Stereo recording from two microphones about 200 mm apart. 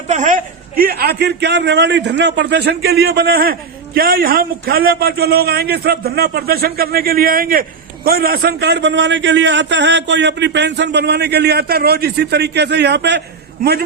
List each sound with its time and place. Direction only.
0.1 s a man's voice: 40° right (ahead or behind)